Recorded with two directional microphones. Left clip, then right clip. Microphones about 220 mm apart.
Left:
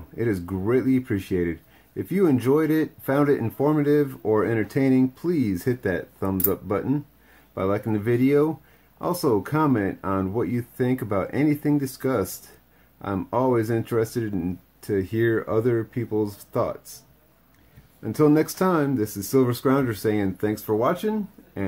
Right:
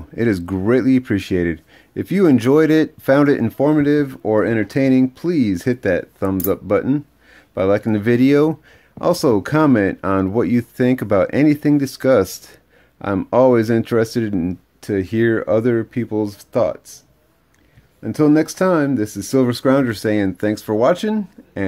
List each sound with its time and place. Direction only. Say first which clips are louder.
0.1 s speech: right 7 dB; 40° right (ahead or behind)
18.0 s speech: right 4 dB; 30° right (ahead or behind)